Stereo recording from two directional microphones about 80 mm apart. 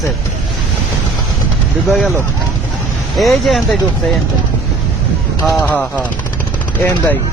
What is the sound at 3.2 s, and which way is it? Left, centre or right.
Speech, centre.